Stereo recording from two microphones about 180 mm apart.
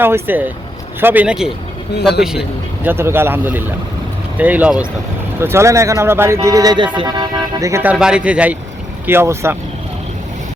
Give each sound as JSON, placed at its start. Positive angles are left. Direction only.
{"t": 0.0, "sound": "speech", "side_deg": -10}